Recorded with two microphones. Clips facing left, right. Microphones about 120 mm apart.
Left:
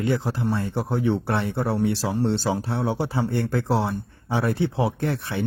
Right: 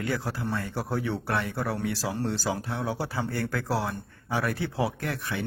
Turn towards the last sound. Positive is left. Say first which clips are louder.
# left 6 dB
turn(degrees=30)  # may be behind; listen again after turning